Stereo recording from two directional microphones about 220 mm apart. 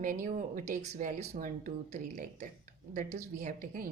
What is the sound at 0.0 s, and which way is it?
A woman's voice, 35° right (ahead or behind).